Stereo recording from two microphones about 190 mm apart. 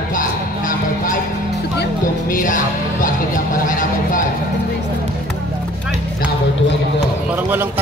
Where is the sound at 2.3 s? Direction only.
45° left (ahead or behind).